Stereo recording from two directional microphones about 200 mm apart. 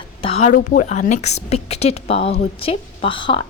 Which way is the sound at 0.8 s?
35° left (ahead or behind).